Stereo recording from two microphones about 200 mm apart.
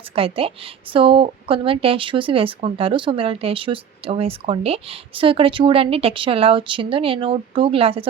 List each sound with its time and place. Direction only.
0.2 s a woman's voice: 30° right (ahead or behind)